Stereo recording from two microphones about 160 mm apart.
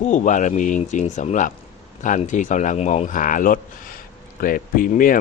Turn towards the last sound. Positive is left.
turn(degrees=60)  # may be behind; listen again after turning